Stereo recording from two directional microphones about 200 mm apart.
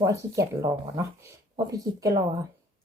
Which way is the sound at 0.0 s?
15° right (ahead or behind).